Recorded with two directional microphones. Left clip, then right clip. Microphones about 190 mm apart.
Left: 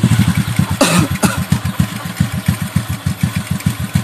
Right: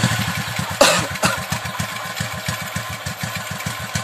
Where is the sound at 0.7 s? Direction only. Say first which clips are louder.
Even; 15° left (ahead or behind).